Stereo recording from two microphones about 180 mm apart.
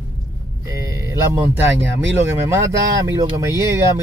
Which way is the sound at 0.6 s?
15° right (ahead or behind).